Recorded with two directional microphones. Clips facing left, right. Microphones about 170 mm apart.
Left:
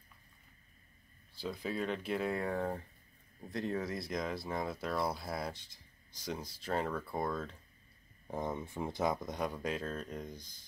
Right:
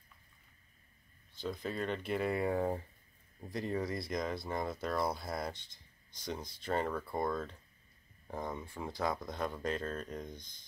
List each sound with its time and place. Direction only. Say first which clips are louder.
1.4 s speech: even; 5° left (ahead or behind)
6.6 s speech: right 1 dB; 5° left (ahead or behind)
8.3 s speech: left 2 dB; 20° left (ahead or behind)